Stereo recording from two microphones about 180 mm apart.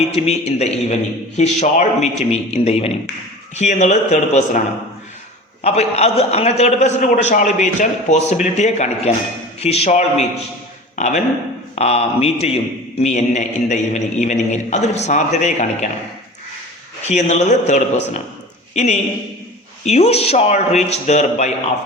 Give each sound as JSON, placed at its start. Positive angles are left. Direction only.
{"t": 0.1, "sound": "a man's voice", "side_deg": 35}
{"t": 5.6, "sound": "a man's voice", "side_deg": 35}
{"t": 17.1, "sound": "a man's voice", "side_deg": 40}